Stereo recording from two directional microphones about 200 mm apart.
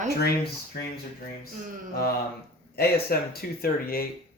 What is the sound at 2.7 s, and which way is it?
Speech, 50° left (ahead or behind).